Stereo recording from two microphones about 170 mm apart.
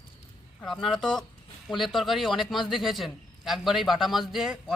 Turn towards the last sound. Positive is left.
turn(degrees=0)  # may be behind; listen again after turning